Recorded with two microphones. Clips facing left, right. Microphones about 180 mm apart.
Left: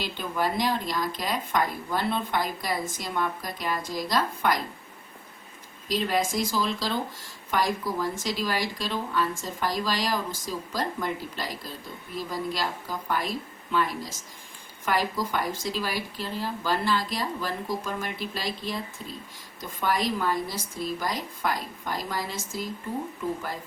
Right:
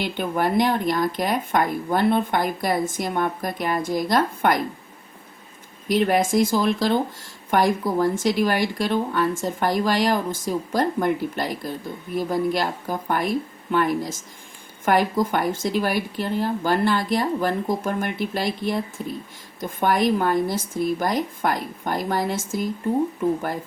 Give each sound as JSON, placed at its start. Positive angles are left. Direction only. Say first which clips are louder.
{"t": 0.0, "sound": "speech", "louder": "right 5 dB", "side_deg": -60}
{"t": 5.9, "sound": "speech", "louder": "right 7 dB", "side_deg": -60}
{"t": 19.8, "sound": "speech", "louder": "right 6 dB", "side_deg": -55}